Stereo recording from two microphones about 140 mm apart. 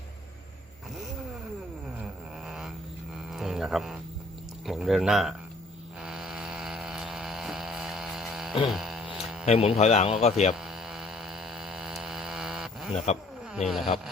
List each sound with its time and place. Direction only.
2.5 s a sound: 5° right (ahead or behind)
3.3 s music: centre (ahead or behind)
4.6 s a sound: centre (ahead or behind)
9.5 s a man's voice: 45° left (ahead or behind)
10.5 s hum: 5° right (ahead or behind)
13.5 s speech: centre (ahead or behind)